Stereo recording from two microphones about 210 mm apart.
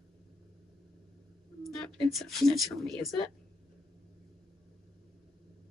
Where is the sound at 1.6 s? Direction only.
Centre (ahead or behind).